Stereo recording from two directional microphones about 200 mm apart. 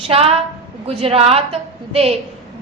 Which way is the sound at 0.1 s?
30° right (ahead or behind).